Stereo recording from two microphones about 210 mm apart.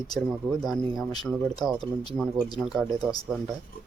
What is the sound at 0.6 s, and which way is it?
Speech, centre (ahead or behind).